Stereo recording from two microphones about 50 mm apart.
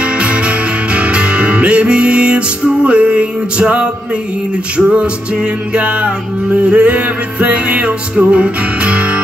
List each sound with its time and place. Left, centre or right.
0.0 s music: right